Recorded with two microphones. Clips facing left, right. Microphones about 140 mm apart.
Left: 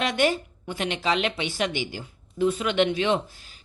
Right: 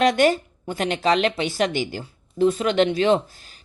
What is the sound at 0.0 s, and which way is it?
Speech, 45° right (ahead or behind).